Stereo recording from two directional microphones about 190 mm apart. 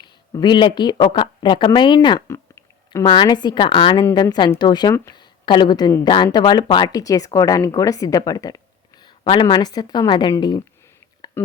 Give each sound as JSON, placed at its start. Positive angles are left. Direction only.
{"t": 0.3, "sound": "a woman's voice", "side_deg": 25}
{"t": 11.4, "sound": "speech", "side_deg": 10}